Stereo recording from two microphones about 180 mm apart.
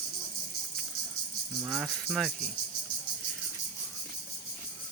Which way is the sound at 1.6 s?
Centre (ahead or behind).